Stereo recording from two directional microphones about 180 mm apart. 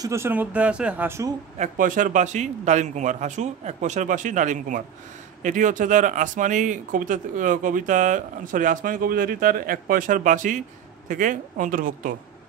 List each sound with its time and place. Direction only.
0.0 s speech: 15° right (ahead or behind)
1.6 s speech: 45° right (ahead or behind)